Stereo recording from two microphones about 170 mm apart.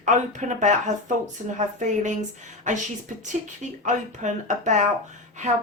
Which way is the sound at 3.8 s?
45° right (ahead or behind).